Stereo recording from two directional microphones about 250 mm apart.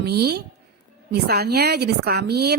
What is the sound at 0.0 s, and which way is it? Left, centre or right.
A woman's voice, right.